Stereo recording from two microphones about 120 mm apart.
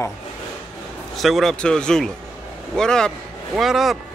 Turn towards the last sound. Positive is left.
turn(degrees=-5)  # may be behind; listen again after turning